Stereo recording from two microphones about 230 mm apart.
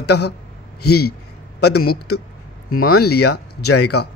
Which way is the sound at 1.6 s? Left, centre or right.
Left.